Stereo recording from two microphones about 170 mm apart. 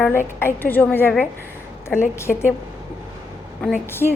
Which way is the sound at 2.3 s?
Centre (ahead or behind).